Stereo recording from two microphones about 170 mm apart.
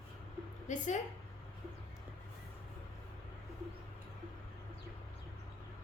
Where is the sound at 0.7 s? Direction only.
45° left (ahead or behind).